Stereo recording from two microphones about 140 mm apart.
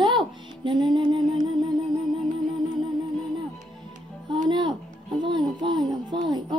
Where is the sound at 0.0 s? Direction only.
35° right (ahead or behind).